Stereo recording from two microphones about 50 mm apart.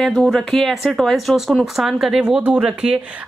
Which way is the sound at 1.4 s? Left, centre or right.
Centre.